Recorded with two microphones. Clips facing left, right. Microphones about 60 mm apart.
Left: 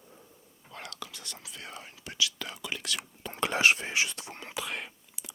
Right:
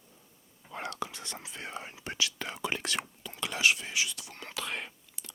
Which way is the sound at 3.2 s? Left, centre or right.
Left.